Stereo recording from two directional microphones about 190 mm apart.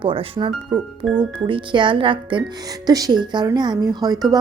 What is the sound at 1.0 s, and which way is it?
Speech, centre (ahead or behind).